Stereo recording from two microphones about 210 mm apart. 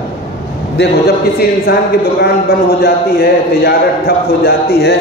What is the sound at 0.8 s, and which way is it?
A man's voice, 50° left (ahead or behind).